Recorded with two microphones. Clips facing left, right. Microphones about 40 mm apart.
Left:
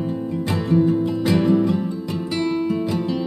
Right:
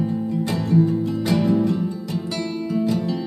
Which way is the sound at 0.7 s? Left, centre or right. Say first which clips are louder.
Left 2 dB; left.